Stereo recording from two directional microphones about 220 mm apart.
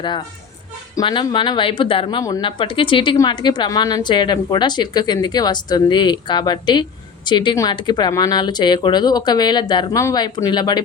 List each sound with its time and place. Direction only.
0.9 s speech: 20° left (ahead or behind)